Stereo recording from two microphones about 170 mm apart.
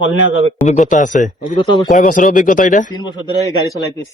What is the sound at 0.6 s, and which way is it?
Speech, 45° left (ahead or behind).